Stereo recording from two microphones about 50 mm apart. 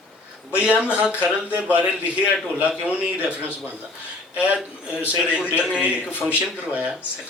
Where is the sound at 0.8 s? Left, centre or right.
Right.